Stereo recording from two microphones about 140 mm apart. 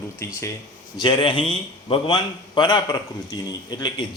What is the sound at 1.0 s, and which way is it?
A man's voice, 35° left (ahead or behind).